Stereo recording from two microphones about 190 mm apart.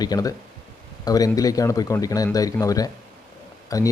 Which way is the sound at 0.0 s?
20° left (ahead or behind).